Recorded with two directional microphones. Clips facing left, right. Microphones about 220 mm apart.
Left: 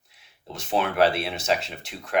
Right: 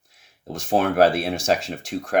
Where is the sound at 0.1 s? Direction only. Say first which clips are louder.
Right 7 dB; 45° right (ahead or behind).